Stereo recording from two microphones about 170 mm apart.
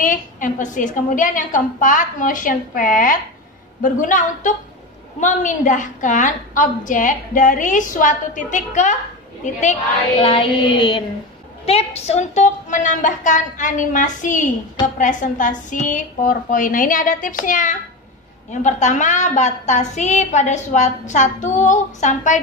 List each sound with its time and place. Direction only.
0.0 s a woman's voice: 50° left (ahead or behind)
10.2 s music: 30° left (ahead or behind)
11.6 s a woman's voice: 35° left (ahead or behind)